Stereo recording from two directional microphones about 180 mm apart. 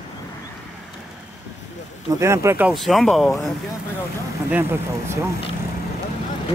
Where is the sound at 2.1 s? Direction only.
15° right (ahead or behind).